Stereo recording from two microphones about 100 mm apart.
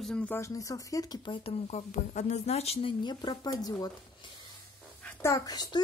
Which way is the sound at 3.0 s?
45° left (ahead or behind).